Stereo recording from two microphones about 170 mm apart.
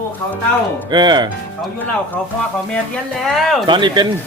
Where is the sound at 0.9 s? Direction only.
25° right (ahead or behind).